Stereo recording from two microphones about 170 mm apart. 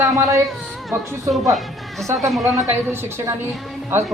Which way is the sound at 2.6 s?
15° right (ahead or behind).